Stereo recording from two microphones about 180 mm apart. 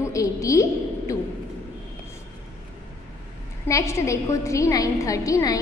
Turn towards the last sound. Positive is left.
turn(degrees=20)  # may be behind; listen again after turning